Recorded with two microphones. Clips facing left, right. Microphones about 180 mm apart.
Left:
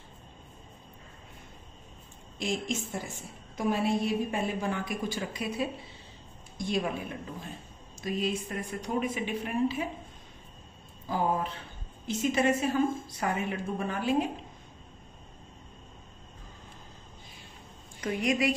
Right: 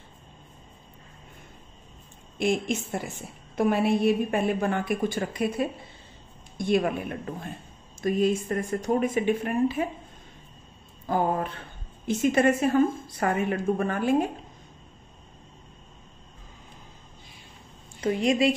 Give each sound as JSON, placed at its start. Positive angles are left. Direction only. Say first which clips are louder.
{"t": 2.3, "sound": "a woman's voice", "louder": "right 6 dB", "side_deg": -60}
{"t": 8.0, "sound": "speech", "louder": "right 7 dB", "side_deg": -50}
{"t": 11.1, "sound": "a woman's voice", "louder": "right 4 dB", "side_deg": -55}
{"t": 18.0, "sound": "a woman's voice", "louder": "right 5 dB", "side_deg": -30}